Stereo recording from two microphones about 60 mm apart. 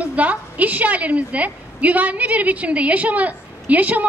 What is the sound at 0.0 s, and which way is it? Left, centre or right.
A woman's voice, right.